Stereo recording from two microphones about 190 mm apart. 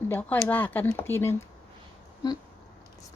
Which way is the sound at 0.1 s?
10° left (ahead or behind).